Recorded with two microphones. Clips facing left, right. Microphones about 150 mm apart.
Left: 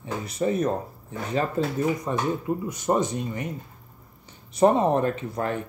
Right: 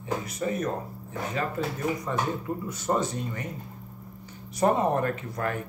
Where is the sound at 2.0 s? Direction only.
15° left (ahead or behind).